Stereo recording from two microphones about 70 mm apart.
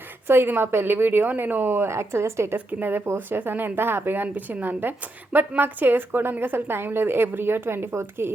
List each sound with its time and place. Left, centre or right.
0.3 s speech: right
2.7 s speech: right